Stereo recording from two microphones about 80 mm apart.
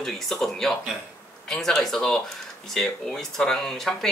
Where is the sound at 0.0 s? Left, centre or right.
Centre.